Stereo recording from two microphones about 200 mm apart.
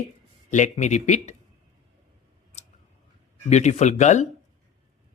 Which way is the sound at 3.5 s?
35° left (ahead or behind).